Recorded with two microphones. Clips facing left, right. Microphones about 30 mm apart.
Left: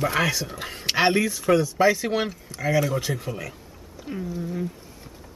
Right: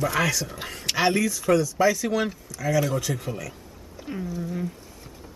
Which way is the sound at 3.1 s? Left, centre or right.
Centre.